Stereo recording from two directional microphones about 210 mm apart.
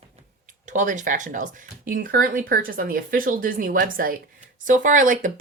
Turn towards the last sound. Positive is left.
turn(degrees=-40)  # may be behind; listen again after turning